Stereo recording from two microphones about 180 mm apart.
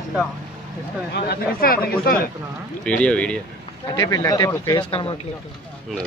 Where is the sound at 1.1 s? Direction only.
60° left (ahead or behind).